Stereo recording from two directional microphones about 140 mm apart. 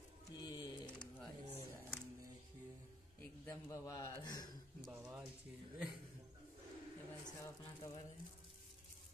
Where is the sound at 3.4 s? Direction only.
25° left (ahead or behind).